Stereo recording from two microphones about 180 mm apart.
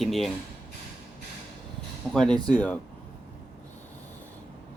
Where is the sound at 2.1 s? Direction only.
5° left (ahead or behind).